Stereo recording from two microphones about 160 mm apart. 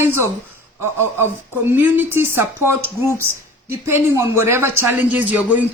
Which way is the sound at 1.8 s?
15° right (ahead or behind).